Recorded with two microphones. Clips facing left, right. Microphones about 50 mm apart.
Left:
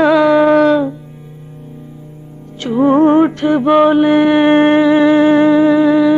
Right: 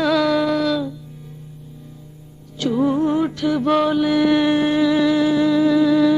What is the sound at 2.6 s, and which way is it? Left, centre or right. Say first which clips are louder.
Mantra: left 8 dB; left.